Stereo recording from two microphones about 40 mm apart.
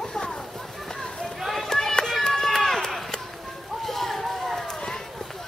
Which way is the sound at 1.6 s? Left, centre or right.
Centre.